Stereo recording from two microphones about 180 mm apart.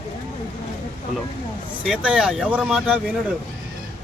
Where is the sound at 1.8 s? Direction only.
5° right (ahead or behind).